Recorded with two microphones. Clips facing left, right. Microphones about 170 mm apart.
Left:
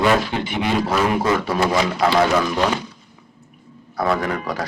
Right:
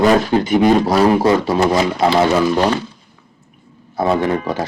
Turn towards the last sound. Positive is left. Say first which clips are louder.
# right 6 dB
turn(degrees=-25)  # may be behind; listen again after turning